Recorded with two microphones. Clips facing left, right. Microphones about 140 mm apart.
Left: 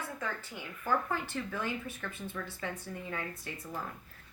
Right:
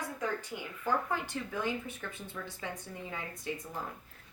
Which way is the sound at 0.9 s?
15° right (ahead or behind).